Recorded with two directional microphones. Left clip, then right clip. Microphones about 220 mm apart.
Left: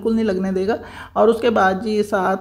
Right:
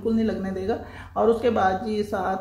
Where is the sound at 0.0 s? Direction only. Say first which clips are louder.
Left 6 dB; 40° left (ahead or behind).